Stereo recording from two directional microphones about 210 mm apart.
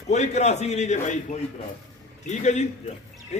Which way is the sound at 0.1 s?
30° left (ahead or behind).